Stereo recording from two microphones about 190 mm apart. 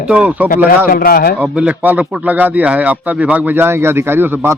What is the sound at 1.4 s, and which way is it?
A man's voice, 10° right (ahead or behind).